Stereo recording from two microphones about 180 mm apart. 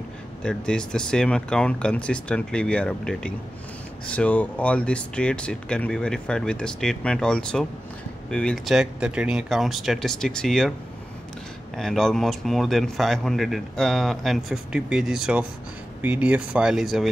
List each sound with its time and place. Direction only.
0.4 s speech: 5° left (ahead or behind)
11.7 s speech: centre (ahead or behind)